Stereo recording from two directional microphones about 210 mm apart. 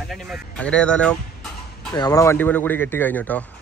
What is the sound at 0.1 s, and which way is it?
Speech, centre (ahead or behind).